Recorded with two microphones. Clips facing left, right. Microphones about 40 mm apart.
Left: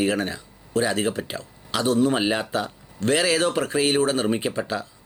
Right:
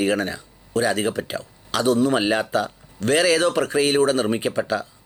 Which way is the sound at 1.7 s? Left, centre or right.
Left.